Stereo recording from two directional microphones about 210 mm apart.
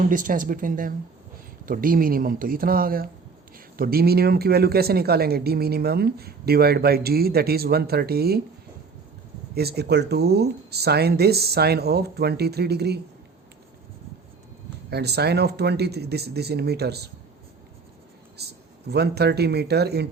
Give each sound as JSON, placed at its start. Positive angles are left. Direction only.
{"t": 0.1, "sound": "speech", "side_deg": -40}
{"t": 9.6, "sound": "speech", "side_deg": -50}
{"t": 14.8, "sound": "speech", "side_deg": -50}
{"t": 18.4, "sound": "speech", "side_deg": -50}